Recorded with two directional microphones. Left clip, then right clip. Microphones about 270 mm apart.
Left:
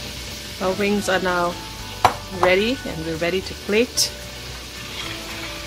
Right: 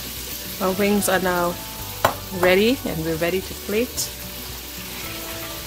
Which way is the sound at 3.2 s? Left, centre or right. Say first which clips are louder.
Left 1 dB; centre.